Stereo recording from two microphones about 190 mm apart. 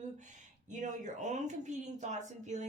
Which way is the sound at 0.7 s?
40° right (ahead or behind).